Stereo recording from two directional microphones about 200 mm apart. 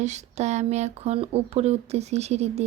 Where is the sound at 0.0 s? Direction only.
35° right (ahead or behind).